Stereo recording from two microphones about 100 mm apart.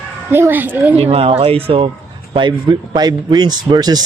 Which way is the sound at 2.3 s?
50° right (ahead or behind).